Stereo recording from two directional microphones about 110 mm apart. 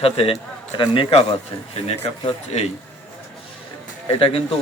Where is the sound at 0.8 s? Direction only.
50° left (ahead or behind).